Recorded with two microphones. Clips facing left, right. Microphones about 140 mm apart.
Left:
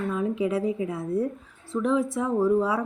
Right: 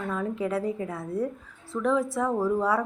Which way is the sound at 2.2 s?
Centre (ahead or behind).